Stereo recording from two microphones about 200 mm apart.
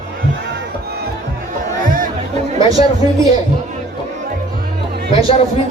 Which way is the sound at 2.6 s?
20° right (ahead or behind).